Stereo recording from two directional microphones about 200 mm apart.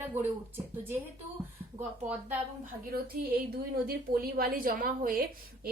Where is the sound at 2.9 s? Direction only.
50° right (ahead or behind).